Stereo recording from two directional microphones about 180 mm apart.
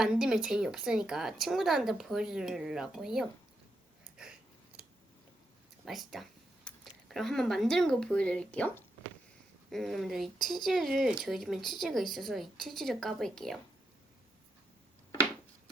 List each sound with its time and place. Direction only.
0.0 s a woman's voice: 5° right (ahead or behind)
5.8 s a woman's voice: centre (ahead or behind)